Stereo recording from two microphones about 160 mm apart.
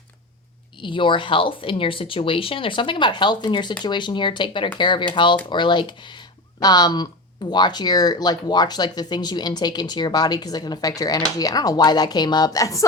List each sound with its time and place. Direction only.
0.8 s speech: 30° left (ahead or behind)